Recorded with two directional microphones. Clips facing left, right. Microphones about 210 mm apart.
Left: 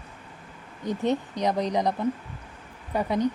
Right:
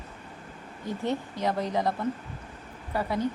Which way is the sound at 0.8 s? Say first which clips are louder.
Left 4 dB; 20° left (ahead or behind).